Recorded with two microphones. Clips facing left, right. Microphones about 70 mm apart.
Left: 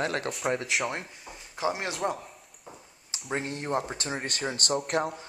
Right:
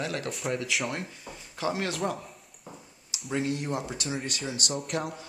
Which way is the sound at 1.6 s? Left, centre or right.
Left.